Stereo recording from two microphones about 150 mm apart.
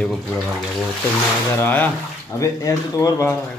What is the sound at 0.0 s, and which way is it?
Speech, 5° left (ahead or behind).